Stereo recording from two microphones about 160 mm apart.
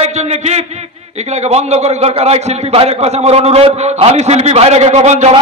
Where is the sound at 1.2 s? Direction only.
45° right (ahead or behind).